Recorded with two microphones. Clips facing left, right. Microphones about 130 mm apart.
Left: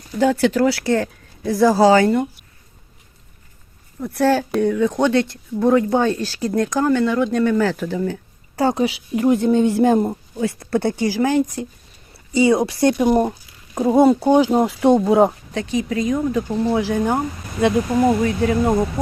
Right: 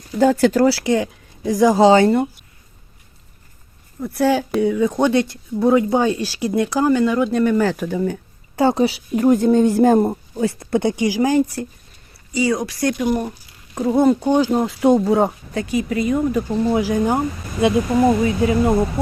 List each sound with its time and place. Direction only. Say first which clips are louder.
0.2 s speech: right 2 dB; 40° right (ahead or behind)
0.9 s speech: right 1 dB; 15° right (ahead or behind)
4.0 s speech: even; 10° right (ahead or behind)
8.6 s speech: right 2 dB; 30° right (ahead or behind)
10.7 s speech: even; 15° right (ahead or behind)
12.1 s speech: left 4 dB; 25° left (ahead or behind)
13.7 s speech: left 2 dB; 15° left (ahead or behind)
14.7 s speech: even; centre (ahead or behind)
16.8 s speech: right 1 dB; 10° right (ahead or behind)
18.2 s speech: right 1 dB; 5° right (ahead or behind)